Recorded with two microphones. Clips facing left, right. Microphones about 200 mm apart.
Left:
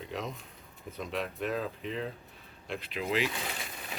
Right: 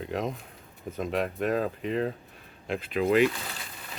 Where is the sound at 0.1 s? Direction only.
50° right (ahead or behind).